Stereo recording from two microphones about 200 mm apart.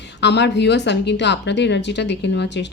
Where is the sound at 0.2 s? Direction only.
60° left (ahead or behind).